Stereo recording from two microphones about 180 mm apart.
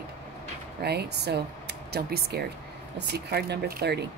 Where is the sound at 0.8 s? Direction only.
65° right (ahead or behind).